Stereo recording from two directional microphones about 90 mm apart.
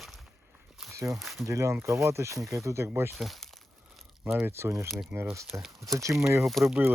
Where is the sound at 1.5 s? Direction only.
30° right (ahead or behind).